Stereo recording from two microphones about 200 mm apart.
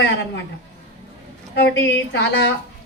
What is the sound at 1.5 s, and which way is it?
A woman's voice, 60° left (ahead or behind).